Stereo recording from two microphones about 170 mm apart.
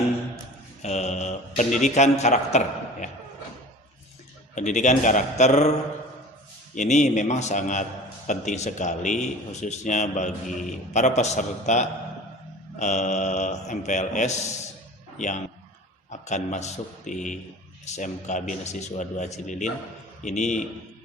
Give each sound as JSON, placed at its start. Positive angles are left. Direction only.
{"t": 0.8, "sound": "a man's voice", "side_deg": 40}
{"t": 4.5, "sound": "a man's voice", "side_deg": 45}
{"t": 6.7, "sound": "a man's voice", "side_deg": 45}
{"t": 16.0, "sound": "a man's voice", "side_deg": 45}